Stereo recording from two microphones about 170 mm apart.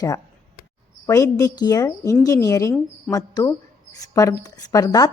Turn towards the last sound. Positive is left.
turn(degrees=20)  # may be behind; listen again after turning